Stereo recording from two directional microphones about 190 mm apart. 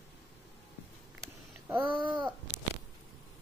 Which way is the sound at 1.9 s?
25° right (ahead or behind).